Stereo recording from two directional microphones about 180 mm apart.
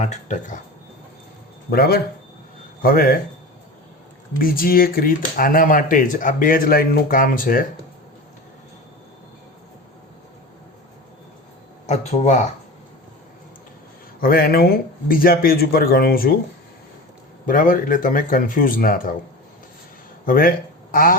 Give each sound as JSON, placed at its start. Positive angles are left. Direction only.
{"t": 0.0, "sound": "speech", "side_deg": 40}
{"t": 1.7, "sound": "a man's voice", "side_deg": 60}
{"t": 4.4, "sound": "speech", "side_deg": 55}
{"t": 11.9, "sound": "speech", "side_deg": 35}
{"t": 14.2, "sound": "a man's voice", "side_deg": 55}
{"t": 17.4, "sound": "speech", "side_deg": 50}
{"t": 20.2, "sound": "speech", "side_deg": 50}